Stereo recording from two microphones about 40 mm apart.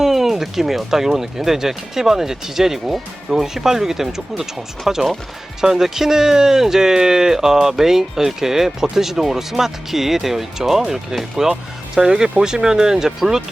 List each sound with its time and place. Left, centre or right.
0.0 s speech: centre